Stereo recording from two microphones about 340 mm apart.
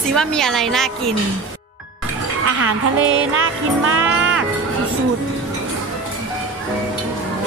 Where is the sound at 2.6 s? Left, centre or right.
Right.